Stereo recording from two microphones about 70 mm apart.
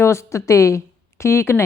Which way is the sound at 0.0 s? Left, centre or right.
Left.